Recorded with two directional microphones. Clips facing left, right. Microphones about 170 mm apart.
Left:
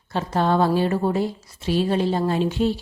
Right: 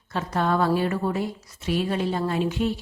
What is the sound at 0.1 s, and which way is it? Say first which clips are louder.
A woman's voice: left 3 dB; 30° left (ahead or behind).